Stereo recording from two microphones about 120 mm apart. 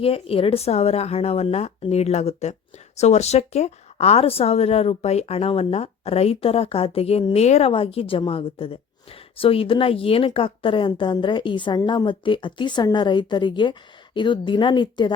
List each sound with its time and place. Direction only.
0.0 s speech: 50° left (ahead or behind)
7.7 s a woman's voice: 50° left (ahead or behind)